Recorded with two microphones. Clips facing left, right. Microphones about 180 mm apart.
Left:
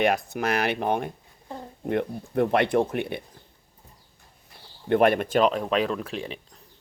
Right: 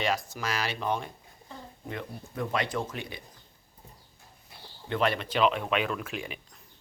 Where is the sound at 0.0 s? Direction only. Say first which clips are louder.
Left 7 dB; 60° left (ahead or behind).